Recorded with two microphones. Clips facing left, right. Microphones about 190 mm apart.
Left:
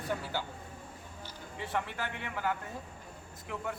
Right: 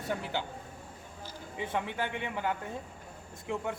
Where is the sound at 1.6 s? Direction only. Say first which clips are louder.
Right 3 dB; 20° right (ahead or behind).